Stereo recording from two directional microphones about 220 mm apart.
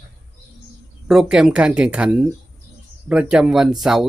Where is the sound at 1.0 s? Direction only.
5° right (ahead or behind).